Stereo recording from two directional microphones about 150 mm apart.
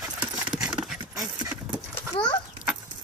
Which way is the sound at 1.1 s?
25° right (ahead or behind).